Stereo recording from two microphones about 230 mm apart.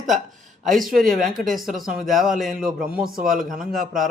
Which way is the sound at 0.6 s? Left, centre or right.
Centre.